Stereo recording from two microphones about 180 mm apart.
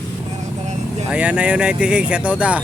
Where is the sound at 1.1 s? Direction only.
5° right (ahead or behind).